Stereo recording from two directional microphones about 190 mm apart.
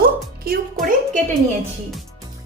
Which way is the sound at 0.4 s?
50° right (ahead or behind).